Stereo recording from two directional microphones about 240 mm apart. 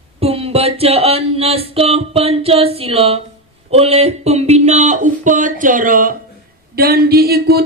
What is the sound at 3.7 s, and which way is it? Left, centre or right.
Speech, right.